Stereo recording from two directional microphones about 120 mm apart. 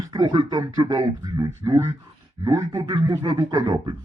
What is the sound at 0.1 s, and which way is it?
Speech, 40° right (ahead or behind).